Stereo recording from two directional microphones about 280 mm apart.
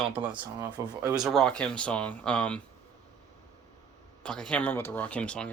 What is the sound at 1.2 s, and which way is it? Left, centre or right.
Speech, centre.